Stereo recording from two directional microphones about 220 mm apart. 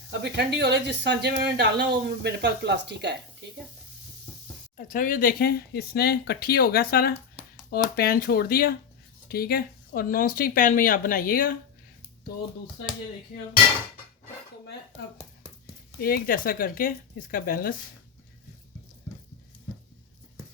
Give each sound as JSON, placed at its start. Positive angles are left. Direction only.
{"t": 0.1, "sound": "speech", "side_deg": -50}
{"t": 4.9, "sound": "speech", "side_deg": 40}
{"t": 16.0, "sound": "speech", "side_deg": 40}